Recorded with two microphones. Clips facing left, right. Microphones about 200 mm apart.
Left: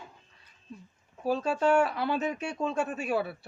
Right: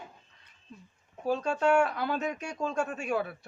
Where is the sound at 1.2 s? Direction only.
5° left (ahead or behind).